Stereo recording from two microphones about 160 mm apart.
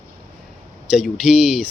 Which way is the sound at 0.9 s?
5° right (ahead or behind).